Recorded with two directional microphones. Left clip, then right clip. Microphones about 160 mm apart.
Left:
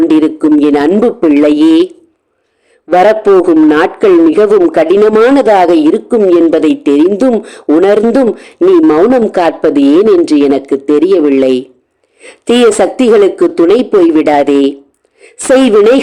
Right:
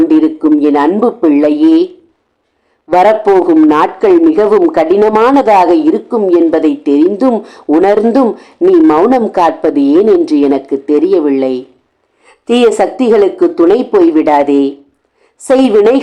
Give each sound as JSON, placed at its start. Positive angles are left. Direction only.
{"t": 0.1, "sound": "a sound", "side_deg": 30}
{"t": 0.6, "sound": "speech", "side_deg": 30}
{"t": 2.9, "sound": "a woman's voice", "side_deg": 25}